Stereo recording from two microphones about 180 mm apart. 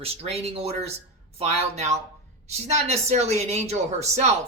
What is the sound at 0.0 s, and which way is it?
Speech, 35° right (ahead or behind).